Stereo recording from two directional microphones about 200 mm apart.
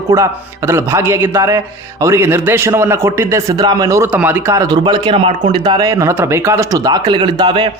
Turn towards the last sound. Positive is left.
turn(degrees=-20)  # may be behind; listen again after turning